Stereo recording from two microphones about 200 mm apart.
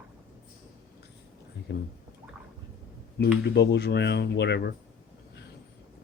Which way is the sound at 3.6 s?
55° left (ahead or behind).